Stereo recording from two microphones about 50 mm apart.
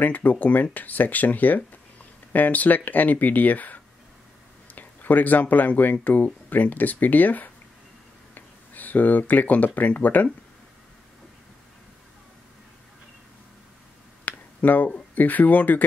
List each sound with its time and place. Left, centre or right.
0.0 s speech: left
8.4 s a sound: left
9.9 s speech: left
14.2 s finger snapping: left
15.1 s speech: left